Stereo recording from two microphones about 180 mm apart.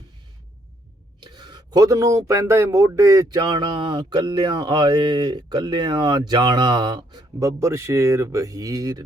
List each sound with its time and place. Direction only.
1.2 s speech: 25° right (ahead or behind)